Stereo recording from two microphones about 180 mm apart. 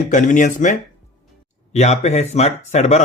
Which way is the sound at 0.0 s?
45° left (ahead or behind).